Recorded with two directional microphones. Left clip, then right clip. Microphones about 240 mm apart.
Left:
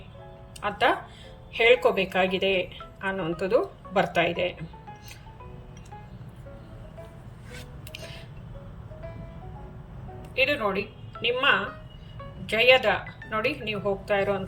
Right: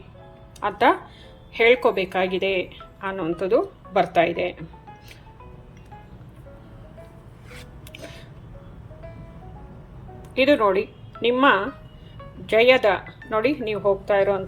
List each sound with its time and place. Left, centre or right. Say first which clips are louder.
0.6 s speech: right 5 dB; centre
7.9 s music: right 1 dB; centre
10.3 s speech: right 7 dB; centre